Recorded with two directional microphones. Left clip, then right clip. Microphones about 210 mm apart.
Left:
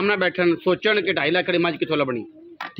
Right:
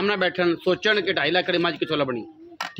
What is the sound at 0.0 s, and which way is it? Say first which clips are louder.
A man's voice: left 2 dB; 25° left (ahead or behind).